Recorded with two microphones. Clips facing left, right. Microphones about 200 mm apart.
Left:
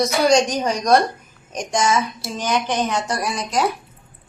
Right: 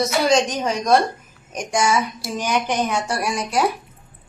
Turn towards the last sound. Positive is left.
turn(degrees=-10)  # may be behind; listen again after turning